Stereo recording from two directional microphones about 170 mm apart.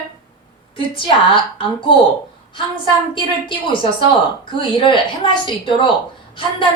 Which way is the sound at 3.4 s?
30° left (ahead or behind).